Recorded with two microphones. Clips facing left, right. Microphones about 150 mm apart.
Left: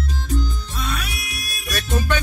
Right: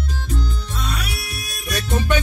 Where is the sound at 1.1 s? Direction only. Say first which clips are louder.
Right 2 dB; 30° right (ahead or behind).